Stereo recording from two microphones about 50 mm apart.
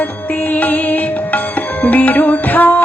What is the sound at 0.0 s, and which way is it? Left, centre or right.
Music, left.